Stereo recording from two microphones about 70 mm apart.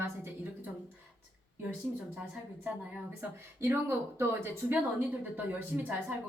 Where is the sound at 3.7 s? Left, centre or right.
Right.